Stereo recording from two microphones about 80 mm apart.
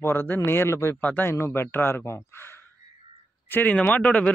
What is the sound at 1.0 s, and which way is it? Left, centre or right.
Speech, left.